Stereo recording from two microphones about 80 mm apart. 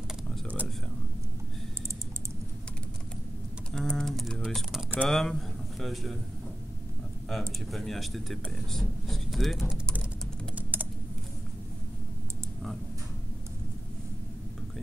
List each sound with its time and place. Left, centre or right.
3.7 s typing: centre
4.5 s a sound: centre
5.0 s speech: centre
7.3 s speech: centre
10.5 s typing: right